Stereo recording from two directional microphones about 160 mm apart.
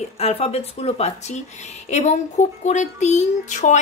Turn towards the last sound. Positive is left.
turn(degrees=50)  # may be behind; listen again after turning